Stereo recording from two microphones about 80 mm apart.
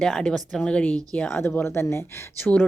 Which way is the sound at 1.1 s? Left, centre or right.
Left.